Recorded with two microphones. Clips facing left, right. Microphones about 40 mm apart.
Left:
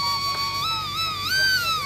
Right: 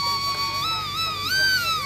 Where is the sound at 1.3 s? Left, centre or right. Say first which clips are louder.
Even; centre.